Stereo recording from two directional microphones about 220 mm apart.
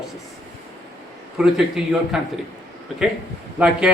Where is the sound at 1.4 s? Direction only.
Centre (ahead or behind).